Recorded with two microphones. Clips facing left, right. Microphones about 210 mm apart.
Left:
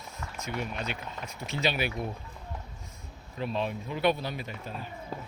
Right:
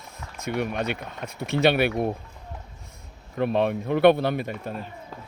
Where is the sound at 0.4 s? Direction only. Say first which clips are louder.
Right 9 dB; 60° right (ahead or behind).